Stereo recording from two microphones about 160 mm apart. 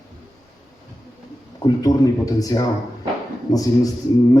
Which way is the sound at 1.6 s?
20° left (ahead or behind).